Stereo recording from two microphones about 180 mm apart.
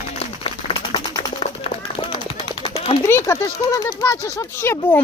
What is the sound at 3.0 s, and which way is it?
Speech, 15° left (ahead or behind).